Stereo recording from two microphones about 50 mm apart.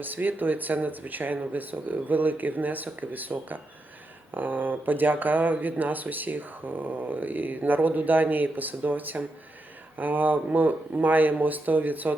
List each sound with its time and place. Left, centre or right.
0.0 s speech: right